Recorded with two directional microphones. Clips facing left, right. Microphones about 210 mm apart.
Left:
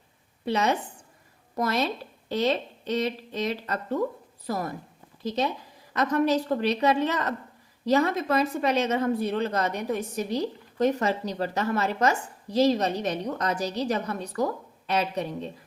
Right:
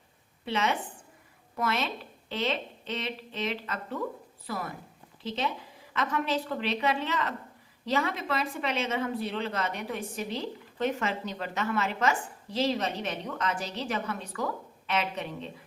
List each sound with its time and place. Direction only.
0.4 s speech: 40° left (ahead or behind)